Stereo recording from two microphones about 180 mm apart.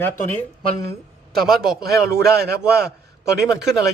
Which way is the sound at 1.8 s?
60° right (ahead or behind).